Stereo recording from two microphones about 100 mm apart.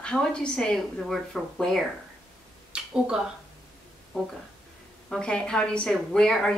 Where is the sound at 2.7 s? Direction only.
10° right (ahead or behind).